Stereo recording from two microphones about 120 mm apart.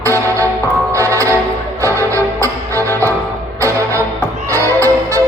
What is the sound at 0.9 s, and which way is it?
Music, 25° right (ahead or behind).